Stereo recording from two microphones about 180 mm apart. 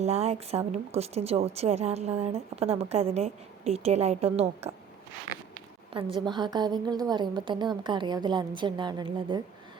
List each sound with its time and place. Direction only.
0.0 s a woman's voice: 35° right (ahead or behind)